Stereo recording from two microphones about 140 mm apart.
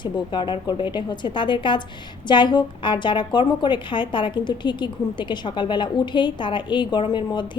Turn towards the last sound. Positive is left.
turn(degrees=35)  # may be behind; listen again after turning